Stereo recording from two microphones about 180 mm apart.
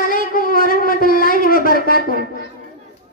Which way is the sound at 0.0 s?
50° left (ahead or behind).